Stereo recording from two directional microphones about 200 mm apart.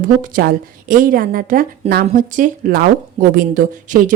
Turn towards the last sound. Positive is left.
turn(degrees=-40)  # may be behind; listen again after turning